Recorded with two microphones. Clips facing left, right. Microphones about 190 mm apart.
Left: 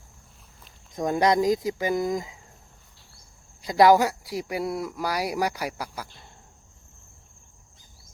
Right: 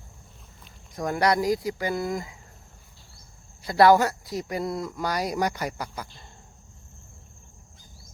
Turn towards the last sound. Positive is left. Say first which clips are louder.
# even
turn(degrees=5)  # may be behind; listen again after turning